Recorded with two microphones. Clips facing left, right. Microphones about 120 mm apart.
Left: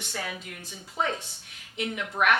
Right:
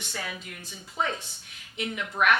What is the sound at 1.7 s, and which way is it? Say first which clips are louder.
Speech: left 1 dB; 50° left (ahead or behind).